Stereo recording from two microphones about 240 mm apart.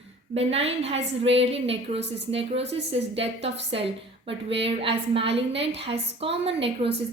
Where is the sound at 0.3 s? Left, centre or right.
Right.